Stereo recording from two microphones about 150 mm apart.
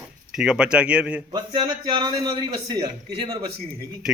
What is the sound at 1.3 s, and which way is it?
A man's voice, 30° right (ahead or behind).